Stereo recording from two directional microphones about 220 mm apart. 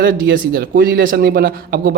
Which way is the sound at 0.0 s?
45° right (ahead or behind).